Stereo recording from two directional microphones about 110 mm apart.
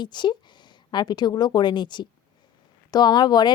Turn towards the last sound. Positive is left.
turn(degrees=40)  # may be behind; listen again after turning